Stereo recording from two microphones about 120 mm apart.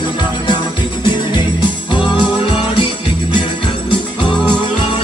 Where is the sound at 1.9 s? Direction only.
40° left (ahead or behind).